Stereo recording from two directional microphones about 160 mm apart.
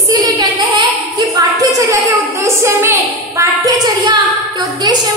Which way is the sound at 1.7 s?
20° right (ahead or behind).